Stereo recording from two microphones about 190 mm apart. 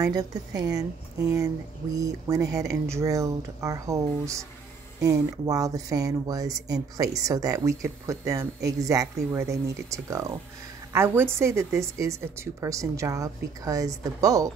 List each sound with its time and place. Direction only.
0.0 s a woman's voice: 20° right (ahead or behind)